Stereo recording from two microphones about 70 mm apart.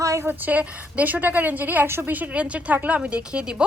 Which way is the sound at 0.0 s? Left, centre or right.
Right.